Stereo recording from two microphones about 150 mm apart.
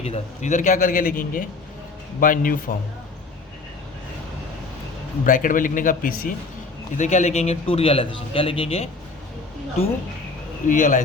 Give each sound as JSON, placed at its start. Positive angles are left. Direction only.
{"t": 0.0, "sound": "a man's voice", "side_deg": 50}
{"t": 5.2, "sound": "a man's voice", "side_deg": 60}
{"t": 6.9, "sound": "a man's voice", "side_deg": 55}
{"t": 10.7, "sound": "a man's voice", "side_deg": 60}